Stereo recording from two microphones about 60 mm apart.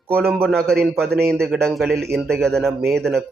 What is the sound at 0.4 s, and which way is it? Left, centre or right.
Speech, centre.